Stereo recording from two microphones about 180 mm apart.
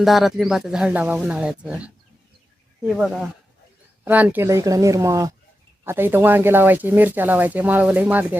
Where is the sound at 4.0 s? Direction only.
10° right (ahead or behind).